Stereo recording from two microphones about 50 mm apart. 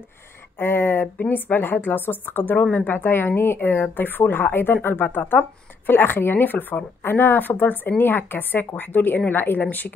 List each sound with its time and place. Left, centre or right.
0.6 s speech: left